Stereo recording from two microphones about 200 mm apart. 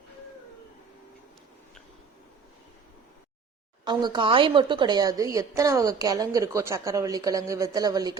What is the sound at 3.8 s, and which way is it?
A woman's voice, 20° right (ahead or behind).